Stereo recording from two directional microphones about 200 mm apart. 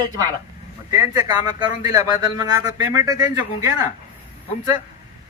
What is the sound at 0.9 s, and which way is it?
A man's voice, 15° right (ahead or behind).